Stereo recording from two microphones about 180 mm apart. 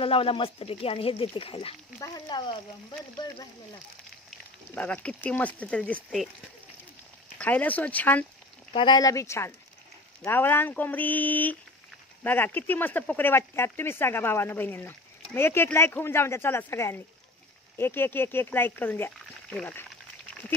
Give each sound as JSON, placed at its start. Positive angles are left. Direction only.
{"t": 0.0, "sound": "speech", "side_deg": 30}
{"t": 4.3, "sound": "speech", "side_deg": 10}
{"t": 7.3, "sound": "speech", "side_deg": 10}
{"t": 8.7, "sound": "speech", "side_deg": 25}